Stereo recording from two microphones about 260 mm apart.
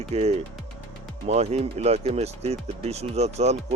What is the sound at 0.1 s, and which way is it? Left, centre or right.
Speech, right.